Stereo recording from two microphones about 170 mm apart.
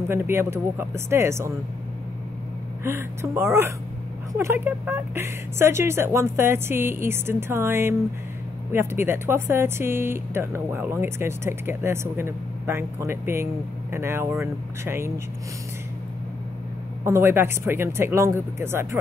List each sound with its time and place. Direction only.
0.1 s speech: 15° right (ahead or behind)
2.8 s speech: 15° right (ahead or behind)
17.0 s speech: 15° right (ahead or behind)